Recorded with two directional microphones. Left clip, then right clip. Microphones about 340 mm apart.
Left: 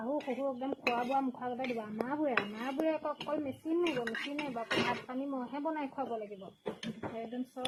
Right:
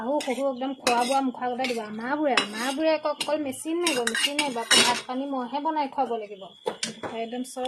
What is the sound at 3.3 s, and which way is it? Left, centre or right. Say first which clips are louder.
Dishes: right 7 dB; centre.